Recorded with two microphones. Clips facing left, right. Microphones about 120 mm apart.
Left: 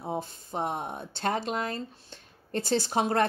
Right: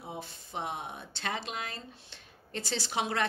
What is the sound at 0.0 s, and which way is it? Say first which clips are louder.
Speech: left 8 dB; 45° left (ahead or behind).